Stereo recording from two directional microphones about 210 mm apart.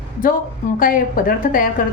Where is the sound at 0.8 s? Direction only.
40° left (ahead or behind).